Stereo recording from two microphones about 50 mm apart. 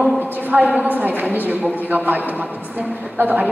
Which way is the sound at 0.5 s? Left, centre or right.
Right.